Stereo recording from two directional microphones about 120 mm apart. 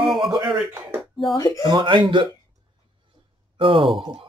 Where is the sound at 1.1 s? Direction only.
Centre (ahead or behind).